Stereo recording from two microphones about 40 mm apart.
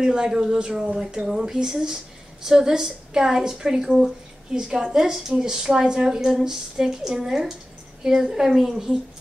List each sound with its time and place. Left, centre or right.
0.0 s a woman's voice: centre